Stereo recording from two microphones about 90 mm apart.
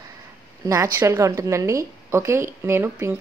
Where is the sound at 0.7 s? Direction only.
35° right (ahead or behind).